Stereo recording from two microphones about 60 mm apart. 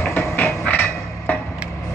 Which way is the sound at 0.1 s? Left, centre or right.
Left.